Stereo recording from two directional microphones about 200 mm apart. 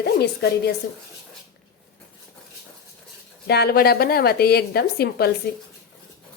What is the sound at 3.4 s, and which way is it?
A woman's voice, 55° left (ahead or behind).